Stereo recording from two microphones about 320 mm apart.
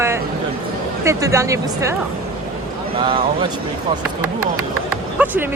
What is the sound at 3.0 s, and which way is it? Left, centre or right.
Speech, centre.